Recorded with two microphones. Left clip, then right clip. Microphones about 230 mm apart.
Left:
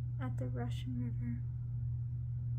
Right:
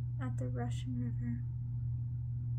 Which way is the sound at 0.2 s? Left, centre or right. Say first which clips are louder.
Right 1 dB; centre.